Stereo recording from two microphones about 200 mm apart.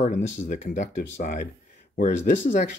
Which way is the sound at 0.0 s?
40° left (ahead or behind).